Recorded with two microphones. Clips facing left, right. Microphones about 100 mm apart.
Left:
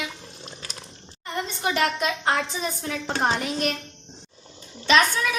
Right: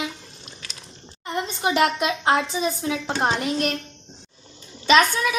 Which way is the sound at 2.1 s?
10° right (ahead or behind).